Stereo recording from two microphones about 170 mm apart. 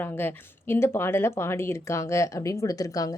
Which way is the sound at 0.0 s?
10° left (ahead or behind).